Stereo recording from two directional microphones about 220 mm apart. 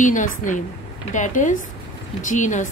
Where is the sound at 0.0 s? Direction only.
35° left (ahead or behind).